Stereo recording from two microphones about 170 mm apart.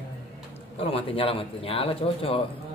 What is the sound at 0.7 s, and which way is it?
Speech, 35° left (ahead or behind).